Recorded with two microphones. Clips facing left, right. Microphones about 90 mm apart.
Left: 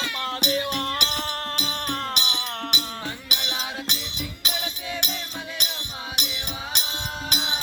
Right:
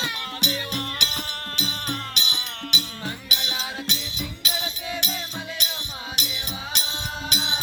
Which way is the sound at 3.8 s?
50° left (ahead or behind).